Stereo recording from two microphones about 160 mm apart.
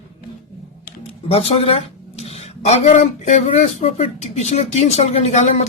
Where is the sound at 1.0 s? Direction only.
40° left (ahead or behind).